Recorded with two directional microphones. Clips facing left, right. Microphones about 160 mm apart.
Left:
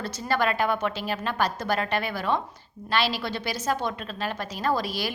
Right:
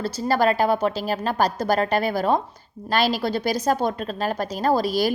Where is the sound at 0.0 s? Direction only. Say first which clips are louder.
Right 5 dB; 35° right (ahead or behind).